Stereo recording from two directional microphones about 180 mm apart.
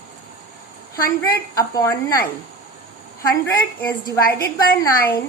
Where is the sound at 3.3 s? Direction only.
20° left (ahead or behind).